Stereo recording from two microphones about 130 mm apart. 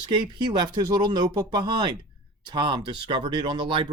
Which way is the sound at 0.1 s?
35° right (ahead or behind).